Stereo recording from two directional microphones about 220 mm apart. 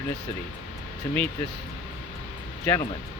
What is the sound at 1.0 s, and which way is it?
Speech, 10° left (ahead or behind).